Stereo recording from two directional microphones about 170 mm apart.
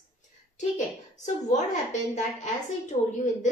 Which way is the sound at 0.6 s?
45° left (ahead or behind).